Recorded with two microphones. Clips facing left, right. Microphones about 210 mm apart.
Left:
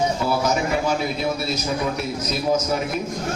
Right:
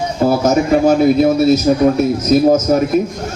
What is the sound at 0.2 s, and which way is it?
A man's voice, 45° right (ahead or behind).